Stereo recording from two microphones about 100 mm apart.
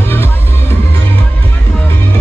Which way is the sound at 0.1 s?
20° left (ahead or behind).